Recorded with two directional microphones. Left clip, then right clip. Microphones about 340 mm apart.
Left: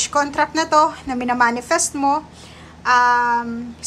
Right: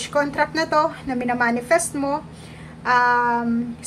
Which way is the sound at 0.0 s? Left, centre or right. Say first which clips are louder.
Left 2 dB; centre.